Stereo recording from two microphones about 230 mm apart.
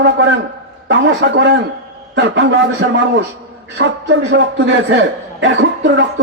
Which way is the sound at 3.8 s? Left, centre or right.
Right.